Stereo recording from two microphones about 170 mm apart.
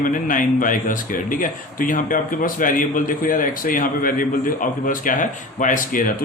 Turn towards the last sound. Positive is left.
turn(degrees=50)  # may be behind; listen again after turning